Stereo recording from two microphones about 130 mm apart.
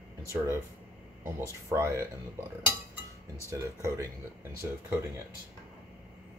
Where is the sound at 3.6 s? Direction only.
25° right (ahead or behind).